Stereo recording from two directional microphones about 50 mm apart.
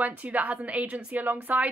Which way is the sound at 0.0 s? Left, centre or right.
Right.